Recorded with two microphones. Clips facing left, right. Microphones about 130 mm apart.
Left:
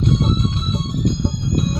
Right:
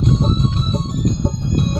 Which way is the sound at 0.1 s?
35° right (ahead or behind).